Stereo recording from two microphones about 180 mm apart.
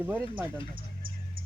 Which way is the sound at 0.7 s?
50° right (ahead or behind).